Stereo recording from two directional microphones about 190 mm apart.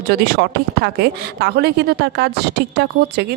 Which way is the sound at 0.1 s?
55° right (ahead or behind).